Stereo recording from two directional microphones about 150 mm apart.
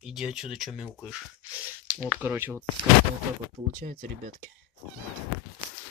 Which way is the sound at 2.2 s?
10° right (ahead or behind).